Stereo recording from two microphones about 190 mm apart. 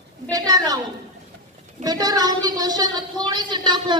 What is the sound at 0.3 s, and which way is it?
Speech, 20° right (ahead or behind).